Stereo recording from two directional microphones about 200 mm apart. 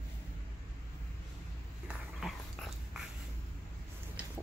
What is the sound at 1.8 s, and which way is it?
Dog, centre (ahead or behind).